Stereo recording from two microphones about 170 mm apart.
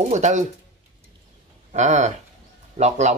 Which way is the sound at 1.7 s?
45° right (ahead or behind).